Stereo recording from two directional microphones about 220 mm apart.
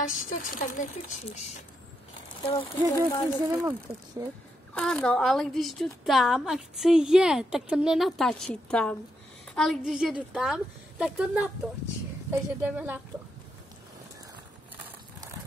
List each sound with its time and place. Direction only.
0.3 s speech: 35° left (ahead or behind)
3.1 s speech: 10° left (ahead or behind)
3.4 s speech: 15° right (ahead or behind)
4.7 s a woman's voice: 5° left (ahead or behind)